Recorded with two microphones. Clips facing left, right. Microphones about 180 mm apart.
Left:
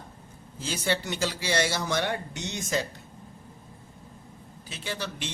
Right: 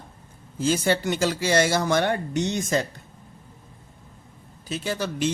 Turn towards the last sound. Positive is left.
turn(degrees=-45)  # may be behind; listen again after turning